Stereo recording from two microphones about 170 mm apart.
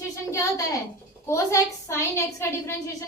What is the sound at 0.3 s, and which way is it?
A woman's voice, 20° left (ahead or behind).